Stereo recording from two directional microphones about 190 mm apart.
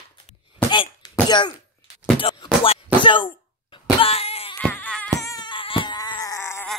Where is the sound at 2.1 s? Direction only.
25° left (ahead or behind).